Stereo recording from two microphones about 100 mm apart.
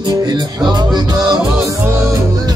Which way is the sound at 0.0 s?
40° right (ahead or behind).